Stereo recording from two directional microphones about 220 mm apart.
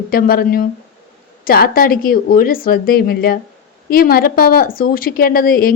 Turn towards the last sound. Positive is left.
turn(degrees=40)  # may be behind; listen again after turning